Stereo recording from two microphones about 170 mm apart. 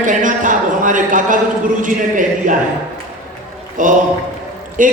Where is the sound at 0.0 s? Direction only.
50° right (ahead or behind).